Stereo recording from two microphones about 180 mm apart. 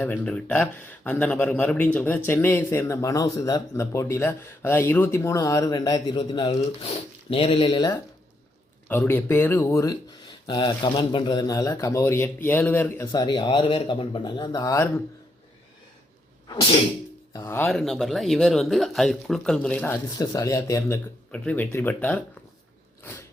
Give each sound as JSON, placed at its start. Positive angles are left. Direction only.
{"t": 0.0, "sound": "speech", "side_deg": 5}
{"t": 8.9, "sound": "speech", "side_deg": 10}
{"t": 17.3, "sound": "speech", "side_deg": 15}